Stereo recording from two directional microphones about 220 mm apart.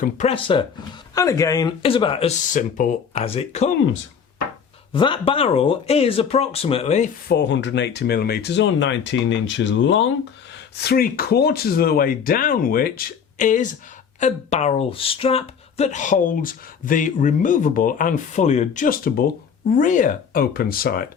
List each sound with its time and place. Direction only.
0.0 s speech: 30° left (ahead or behind)
4.9 s speech: 20° left (ahead or behind)
7.3 s speech: 50° left (ahead or behind)
10.8 s speech: 45° left (ahead or behind)